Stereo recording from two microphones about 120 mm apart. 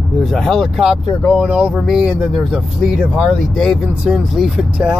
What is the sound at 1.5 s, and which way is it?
Speech, 10° right (ahead or behind).